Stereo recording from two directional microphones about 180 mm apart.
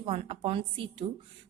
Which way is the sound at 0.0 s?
30° right (ahead or behind).